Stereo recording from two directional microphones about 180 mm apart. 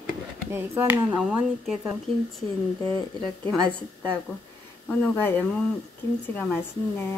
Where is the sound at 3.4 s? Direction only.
10° left (ahead or behind).